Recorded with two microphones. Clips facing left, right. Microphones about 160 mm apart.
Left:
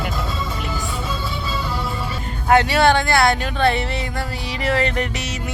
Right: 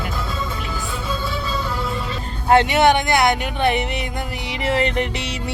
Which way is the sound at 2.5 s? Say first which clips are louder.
Right 1 dB; 20° right (ahead or behind).